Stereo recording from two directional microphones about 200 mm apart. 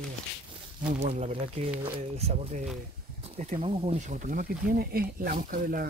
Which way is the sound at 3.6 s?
30° right (ahead or behind).